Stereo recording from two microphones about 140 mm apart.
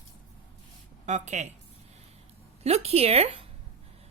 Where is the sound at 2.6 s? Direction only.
45° right (ahead or behind).